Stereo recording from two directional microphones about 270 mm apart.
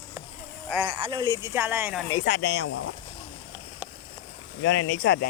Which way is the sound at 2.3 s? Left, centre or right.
Left.